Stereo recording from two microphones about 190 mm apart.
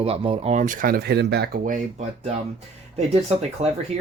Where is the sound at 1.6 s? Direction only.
40° right (ahead or behind).